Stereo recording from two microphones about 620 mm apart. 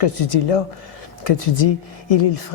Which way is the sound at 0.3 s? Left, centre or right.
Left.